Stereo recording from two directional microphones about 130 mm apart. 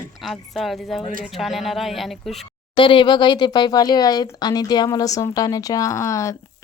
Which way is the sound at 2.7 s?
40° left (ahead or behind).